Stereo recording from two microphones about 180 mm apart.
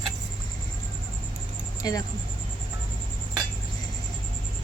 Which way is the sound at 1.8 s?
20° left (ahead or behind).